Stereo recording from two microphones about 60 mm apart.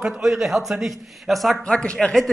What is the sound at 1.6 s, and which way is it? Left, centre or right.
Speech, centre.